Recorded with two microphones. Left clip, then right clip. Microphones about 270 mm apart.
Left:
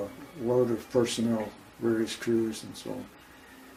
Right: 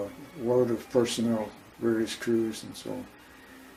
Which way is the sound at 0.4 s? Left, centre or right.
Centre.